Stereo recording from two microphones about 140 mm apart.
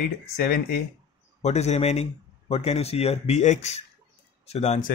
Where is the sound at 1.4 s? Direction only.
55° left (ahead or behind).